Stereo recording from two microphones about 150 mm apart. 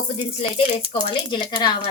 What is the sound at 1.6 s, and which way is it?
Speech, 30° left (ahead or behind).